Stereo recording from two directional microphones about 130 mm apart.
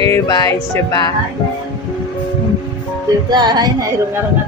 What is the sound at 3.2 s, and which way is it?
Music, 35° right (ahead or behind).